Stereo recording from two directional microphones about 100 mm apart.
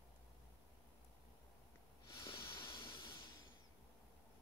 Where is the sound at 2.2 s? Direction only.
50° left (ahead or behind).